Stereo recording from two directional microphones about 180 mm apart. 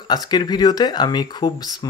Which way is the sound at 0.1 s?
25° left (ahead or behind).